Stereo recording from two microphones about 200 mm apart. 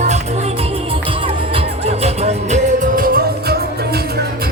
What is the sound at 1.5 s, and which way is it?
Music, 30° right (ahead or behind).